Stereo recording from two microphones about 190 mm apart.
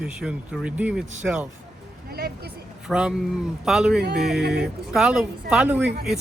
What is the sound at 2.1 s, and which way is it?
Speech, 55° right (ahead or behind).